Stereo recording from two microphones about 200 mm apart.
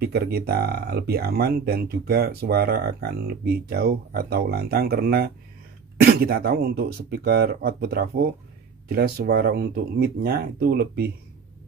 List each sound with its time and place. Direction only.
0.0 s speech: 50° right (ahead or behind)